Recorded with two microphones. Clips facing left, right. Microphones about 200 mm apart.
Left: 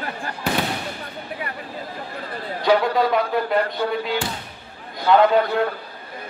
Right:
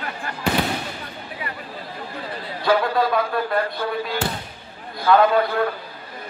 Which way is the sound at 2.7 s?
20° left (ahead or behind).